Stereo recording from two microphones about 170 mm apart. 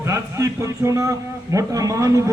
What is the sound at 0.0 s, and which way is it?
A man's voice, 20° right (ahead or behind).